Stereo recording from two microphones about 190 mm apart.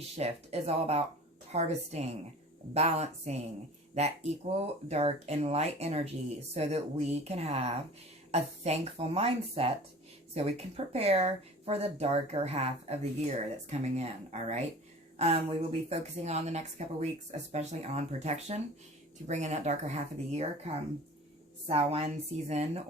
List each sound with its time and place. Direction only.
0.2 s speech: 35° right (ahead or behind)
21.7 s speech: 35° right (ahead or behind)